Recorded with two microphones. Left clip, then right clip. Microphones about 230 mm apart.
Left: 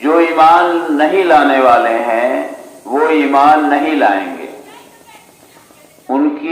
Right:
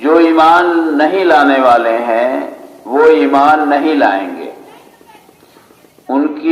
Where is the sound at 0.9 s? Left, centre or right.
Right.